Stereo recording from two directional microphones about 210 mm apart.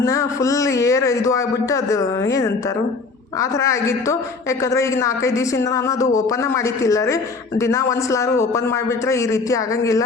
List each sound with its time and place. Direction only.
0.0 s a woman's voice: 15° left (ahead or behind)